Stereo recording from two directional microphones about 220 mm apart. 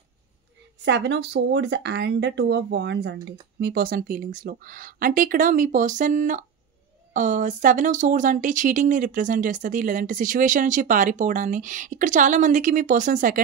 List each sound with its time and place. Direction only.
0.8 s speech: 55° right (ahead or behind); by 13.4 s 35° right (ahead or behind)